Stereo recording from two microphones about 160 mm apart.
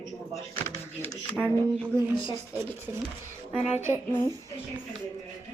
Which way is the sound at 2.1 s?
30° left (ahead or behind).